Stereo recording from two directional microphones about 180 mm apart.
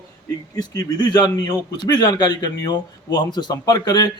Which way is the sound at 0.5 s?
20° left (ahead or behind).